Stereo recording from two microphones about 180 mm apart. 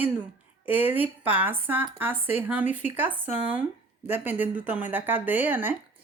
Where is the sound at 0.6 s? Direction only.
10° right (ahead or behind).